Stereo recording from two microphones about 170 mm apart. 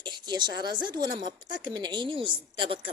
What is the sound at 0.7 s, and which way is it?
Speech, 25° right (ahead or behind).